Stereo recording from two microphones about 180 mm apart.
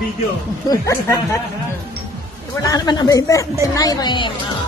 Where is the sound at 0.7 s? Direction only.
20° left (ahead or behind).